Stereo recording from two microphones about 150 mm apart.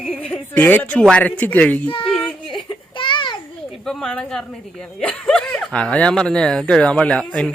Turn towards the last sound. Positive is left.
turn(degrees=5)  # may be behind; listen again after turning